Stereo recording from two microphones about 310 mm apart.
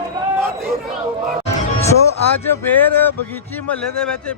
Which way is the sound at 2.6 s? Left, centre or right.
Centre.